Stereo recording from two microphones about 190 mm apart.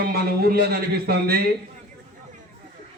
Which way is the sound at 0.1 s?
55° right (ahead or behind).